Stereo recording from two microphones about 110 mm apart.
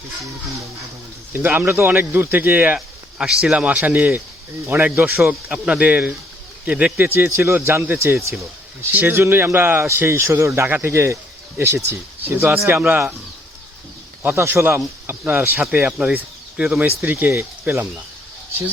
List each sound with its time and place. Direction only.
1.3 s speech: 15° right (ahead or behind)
14.2 s speech: 20° right (ahead or behind)
17.1 s speech: 20° right (ahead or behind)